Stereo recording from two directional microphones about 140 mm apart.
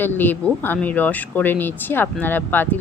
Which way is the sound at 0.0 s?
15° left (ahead or behind).